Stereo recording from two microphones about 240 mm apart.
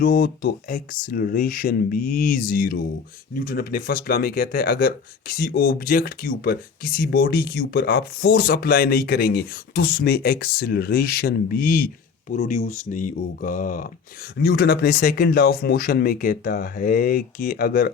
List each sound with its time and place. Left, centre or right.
0.0 s speech: left